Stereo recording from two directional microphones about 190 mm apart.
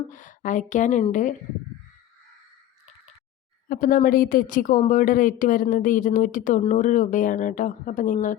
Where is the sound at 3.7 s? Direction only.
45° left (ahead or behind).